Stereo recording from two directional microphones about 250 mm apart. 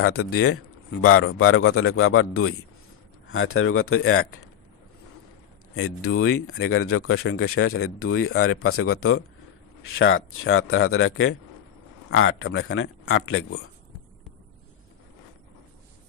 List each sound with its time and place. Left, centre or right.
0.0 s speech: left
5.8 s speech: left